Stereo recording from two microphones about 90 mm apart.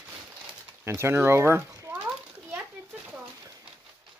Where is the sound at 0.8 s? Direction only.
30° right (ahead or behind).